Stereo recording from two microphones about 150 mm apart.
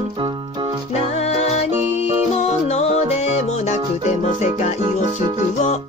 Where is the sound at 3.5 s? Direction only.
50° left (ahead or behind).